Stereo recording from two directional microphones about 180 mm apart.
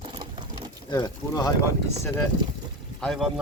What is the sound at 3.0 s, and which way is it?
Speech, centre (ahead or behind).